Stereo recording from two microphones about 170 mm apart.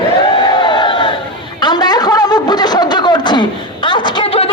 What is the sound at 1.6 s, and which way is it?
Speech, 25° left (ahead or behind).